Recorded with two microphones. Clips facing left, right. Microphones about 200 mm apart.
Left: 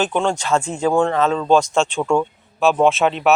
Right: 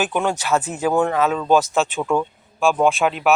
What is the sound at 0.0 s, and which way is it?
Speech, 5° right (ahead or behind).